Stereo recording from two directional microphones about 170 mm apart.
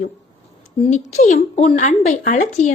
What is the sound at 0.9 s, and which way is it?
Speech, 45° left (ahead or behind).